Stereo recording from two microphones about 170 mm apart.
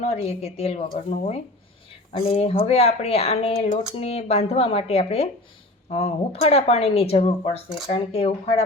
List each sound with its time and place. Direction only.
0.0 s speech: 40° left (ahead or behind)